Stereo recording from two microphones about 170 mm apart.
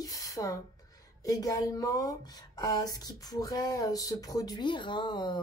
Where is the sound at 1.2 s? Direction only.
20° left (ahead or behind).